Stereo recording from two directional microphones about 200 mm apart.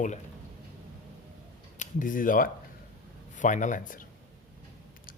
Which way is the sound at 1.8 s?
40° left (ahead or behind).